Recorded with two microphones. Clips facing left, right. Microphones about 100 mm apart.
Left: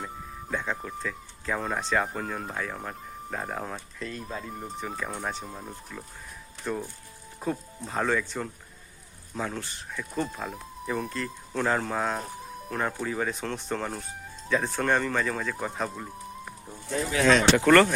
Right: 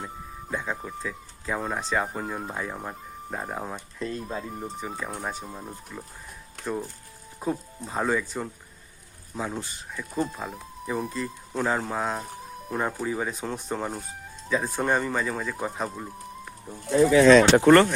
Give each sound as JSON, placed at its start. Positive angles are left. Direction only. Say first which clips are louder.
{"t": 0.0, "sound": "speech", "louder": "even", "side_deg": -5}
{"t": 7.3, "sound": "speech", "louder": "right 2 dB", "side_deg": -5}
{"t": 17.6, "sound": "speech", "louder": "right 3 dB", "side_deg": -25}